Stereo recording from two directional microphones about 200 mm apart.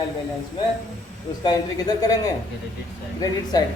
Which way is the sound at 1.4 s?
20° left (ahead or behind).